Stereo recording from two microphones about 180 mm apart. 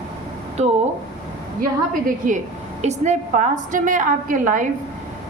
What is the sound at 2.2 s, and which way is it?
A woman's voice, 40° right (ahead or behind).